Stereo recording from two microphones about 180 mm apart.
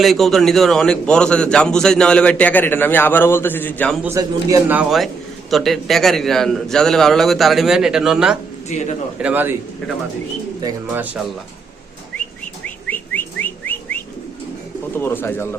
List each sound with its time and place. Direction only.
0.0 s a man's voice: centre (ahead or behind)
4.0 s a man's voice: 15° right (ahead or behind)
4.8 s a man's voice: centre (ahead or behind)
8.7 s a man's voice: 40° left (ahead or behind)
9.2 s a man's voice: 10° right (ahead or behind)
10.6 s speech: 20° right (ahead or behind)
12.6 s whistling: 10° left (ahead or behind)
14.9 s speech: 10° left (ahead or behind)